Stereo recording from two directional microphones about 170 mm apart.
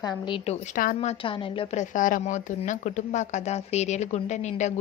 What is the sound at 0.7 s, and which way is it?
A woman's voice, 45° left (ahead or behind).